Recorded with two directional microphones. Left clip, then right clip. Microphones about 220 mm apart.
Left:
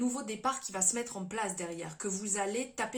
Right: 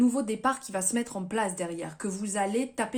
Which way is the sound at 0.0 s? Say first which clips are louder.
Right 7 dB; 40° right (ahead or behind).